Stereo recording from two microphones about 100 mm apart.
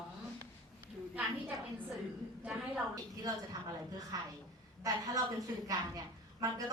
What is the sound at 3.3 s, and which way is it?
A woman's voice, 35° right (ahead or behind).